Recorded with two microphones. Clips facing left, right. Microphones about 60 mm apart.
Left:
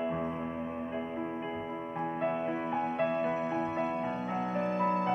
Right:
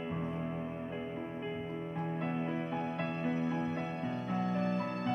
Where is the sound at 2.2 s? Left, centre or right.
Centre.